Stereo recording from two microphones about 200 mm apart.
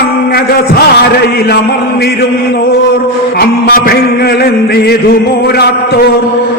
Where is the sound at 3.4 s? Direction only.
50° left (ahead or behind).